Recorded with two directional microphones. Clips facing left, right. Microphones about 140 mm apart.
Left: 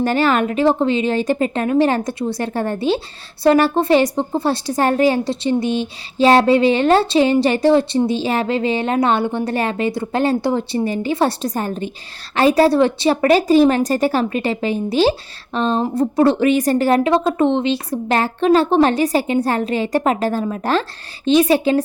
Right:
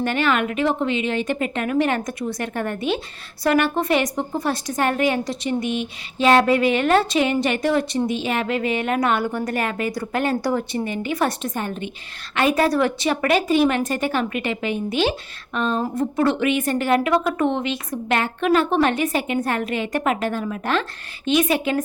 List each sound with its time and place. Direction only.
0.0 s a woman's voice: 35° left (ahead or behind)